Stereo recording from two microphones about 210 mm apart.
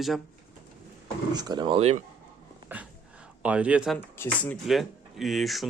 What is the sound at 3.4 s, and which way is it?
Speech, 5° right (ahead or behind).